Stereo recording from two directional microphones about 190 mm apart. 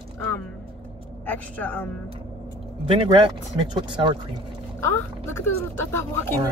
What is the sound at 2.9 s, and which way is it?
Speech, 25° right (ahead or behind).